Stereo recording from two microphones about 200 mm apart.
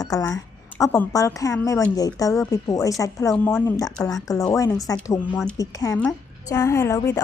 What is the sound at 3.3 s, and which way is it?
Speech, 5° left (ahead or behind).